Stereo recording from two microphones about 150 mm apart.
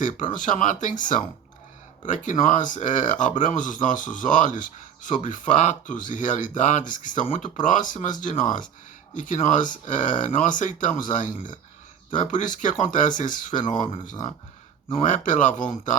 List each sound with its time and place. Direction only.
0.2 s speech: 60° left (ahead or behind)